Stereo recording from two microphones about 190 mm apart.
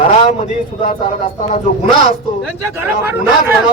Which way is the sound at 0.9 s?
40° left (ahead or behind).